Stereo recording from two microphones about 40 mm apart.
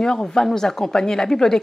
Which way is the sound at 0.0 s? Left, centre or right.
Centre.